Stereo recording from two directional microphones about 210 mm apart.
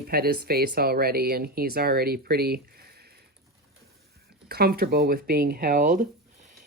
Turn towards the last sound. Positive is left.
turn(degrees=-40)  # may be behind; listen again after turning